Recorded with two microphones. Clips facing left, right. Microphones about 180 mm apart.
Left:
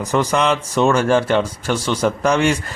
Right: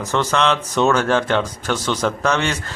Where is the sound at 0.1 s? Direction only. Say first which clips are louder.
Left 1 dB; 15° left (ahead or behind).